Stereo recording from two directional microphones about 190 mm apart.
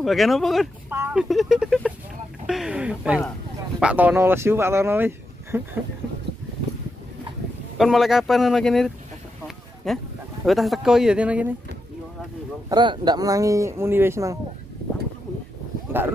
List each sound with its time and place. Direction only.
0.0 s speech: centre (ahead or behind)
0.8 s a sound: 10° right (ahead or behind)
1.3 s speech: centre (ahead or behind)
2.4 s a sound: 5° right (ahead or behind)
3.8 s speech: 10° right (ahead or behind)
7.7 s speech: centre (ahead or behind)
12.6 s speech: 25° right (ahead or behind)
15.9 s speech: 10° right (ahead or behind)